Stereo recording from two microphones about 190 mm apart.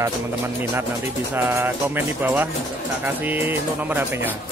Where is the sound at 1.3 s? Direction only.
10° right (ahead or behind).